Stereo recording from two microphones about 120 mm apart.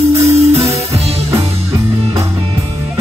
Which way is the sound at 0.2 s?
60° right (ahead or behind).